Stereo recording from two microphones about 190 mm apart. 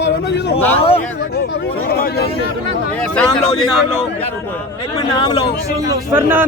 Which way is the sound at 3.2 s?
5° left (ahead or behind).